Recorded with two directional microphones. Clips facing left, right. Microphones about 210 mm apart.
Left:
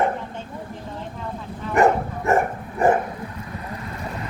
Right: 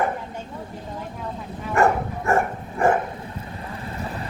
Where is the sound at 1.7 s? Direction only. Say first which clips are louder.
Left 2 dB; 20° left (ahead or behind).